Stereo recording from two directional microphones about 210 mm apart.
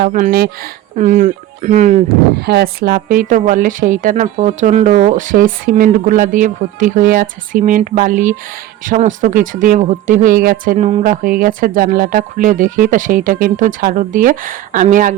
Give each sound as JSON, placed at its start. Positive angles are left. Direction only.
{"t": 0.0, "sound": "a woman's voice", "side_deg": -35}
{"t": 2.4, "sound": "a woman's voice", "side_deg": -50}